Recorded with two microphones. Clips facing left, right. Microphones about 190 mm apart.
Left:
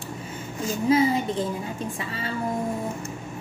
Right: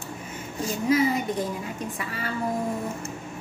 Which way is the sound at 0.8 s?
30° left (ahead or behind).